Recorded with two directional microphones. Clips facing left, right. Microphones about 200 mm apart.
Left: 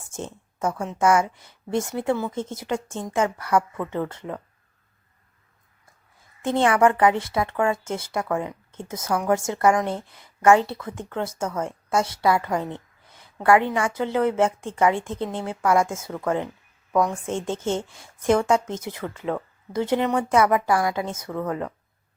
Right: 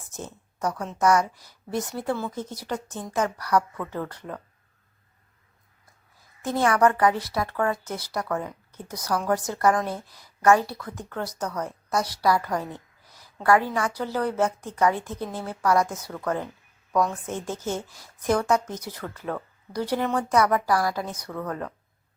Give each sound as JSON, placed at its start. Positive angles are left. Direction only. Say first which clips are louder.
{"t": 0.1, "sound": "a woman's voice", "louder": "left 4 dB", "side_deg": 25}
{"t": 6.4, "sound": "a woman's voice", "louder": "left 2 dB", "side_deg": 25}